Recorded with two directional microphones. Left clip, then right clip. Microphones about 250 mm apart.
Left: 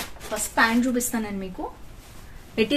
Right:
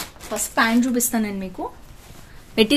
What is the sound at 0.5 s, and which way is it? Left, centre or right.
Speech, right.